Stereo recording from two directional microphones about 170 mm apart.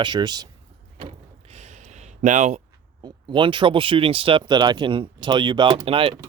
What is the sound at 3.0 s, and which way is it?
Speech, 30° right (ahead or behind).